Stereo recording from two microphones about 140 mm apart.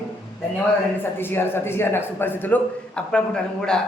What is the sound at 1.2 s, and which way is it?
A man's voice, 15° left (ahead or behind).